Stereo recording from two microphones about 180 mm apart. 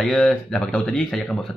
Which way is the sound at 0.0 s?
5° left (ahead or behind).